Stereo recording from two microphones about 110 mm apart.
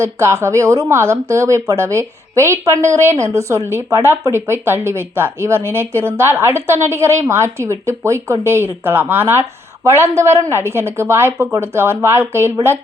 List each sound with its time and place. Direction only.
0.0 s speech: 25° right (ahead or behind)